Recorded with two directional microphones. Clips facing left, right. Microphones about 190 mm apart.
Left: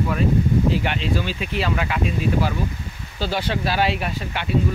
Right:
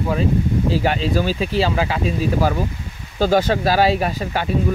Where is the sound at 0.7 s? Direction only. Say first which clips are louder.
Right 4 dB; 40° right (ahead or behind).